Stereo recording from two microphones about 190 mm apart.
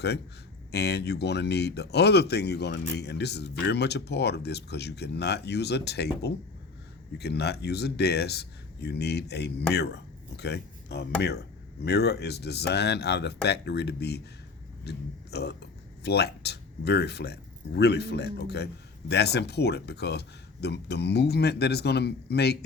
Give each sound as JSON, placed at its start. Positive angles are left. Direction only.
{"t": 0.7, "sound": "speech", "side_deg": 60}